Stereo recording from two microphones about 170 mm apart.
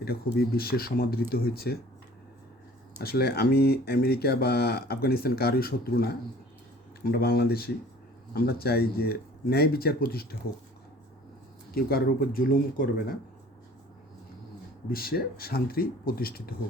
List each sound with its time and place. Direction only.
0.0 s speech: 65° left (ahead or behind)
3.0 s speech: 70° left (ahead or behind)
11.7 s speech: 60° left (ahead or behind)
14.8 s speech: 60° left (ahead or behind)